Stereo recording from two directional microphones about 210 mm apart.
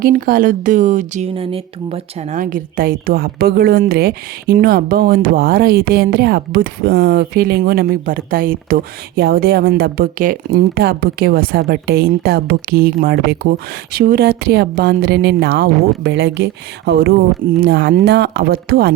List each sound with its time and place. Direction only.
0.0 s a woman's voice: 45° right (ahead or behind)